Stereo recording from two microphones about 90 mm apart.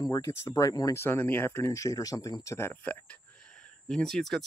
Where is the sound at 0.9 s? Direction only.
25° left (ahead or behind).